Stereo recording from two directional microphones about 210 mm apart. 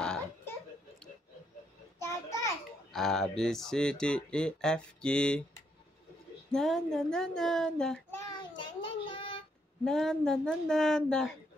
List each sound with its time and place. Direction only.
0.0 s a sound: 5° left (ahead or behind)
2.0 s a sound: 15° left (ahead or behind)
2.9 s speech: centre (ahead or behind)
6.5 s speech: centre (ahead or behind)
8.6 s child singing: 25° left (ahead or behind)
9.8 s speech: 5° left (ahead or behind)